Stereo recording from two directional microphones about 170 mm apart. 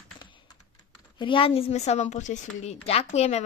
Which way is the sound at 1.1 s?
30° left (ahead or behind).